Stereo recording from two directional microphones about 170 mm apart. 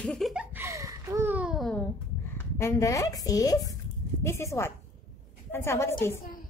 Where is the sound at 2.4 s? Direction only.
15° left (ahead or behind).